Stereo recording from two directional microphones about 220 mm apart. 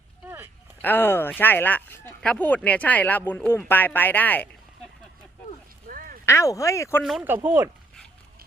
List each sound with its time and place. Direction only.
0.8 s speech: 10° left (ahead or behind)
5.9 s a sound: 40° right (ahead or behind)
6.2 s speech: 15° left (ahead or behind)
7.0 s speech: centre (ahead or behind)